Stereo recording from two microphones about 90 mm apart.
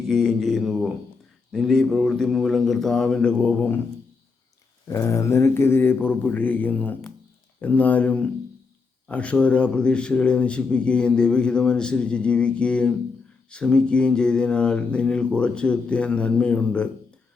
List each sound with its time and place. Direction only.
0.1 s speech: 5° left (ahead or behind)
4.9 s speech: 35° left (ahead or behind); by 16.9 s 10° left (ahead or behind)